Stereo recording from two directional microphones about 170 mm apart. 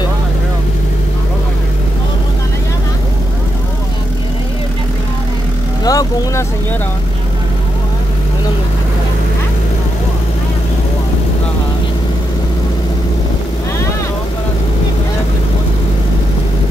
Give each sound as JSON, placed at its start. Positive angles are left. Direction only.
{"t": 5.9, "sound": "vehicle", "side_deg": 20}